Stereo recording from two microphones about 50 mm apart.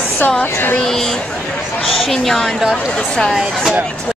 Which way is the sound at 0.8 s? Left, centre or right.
Centre.